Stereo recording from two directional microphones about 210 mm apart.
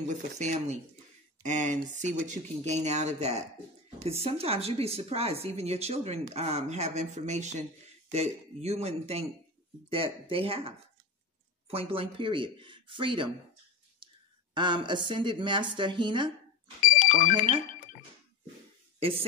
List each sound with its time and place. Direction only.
0.0 s speech: 35° right (ahead or behind)
14.5 s speech: 20° right (ahead or behind)
16.8 s music: 40° left (ahead or behind)